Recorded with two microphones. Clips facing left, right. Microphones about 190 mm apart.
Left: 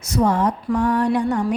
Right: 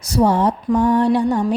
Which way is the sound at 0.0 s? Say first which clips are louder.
Right 3 dB; 30° right (ahead or behind).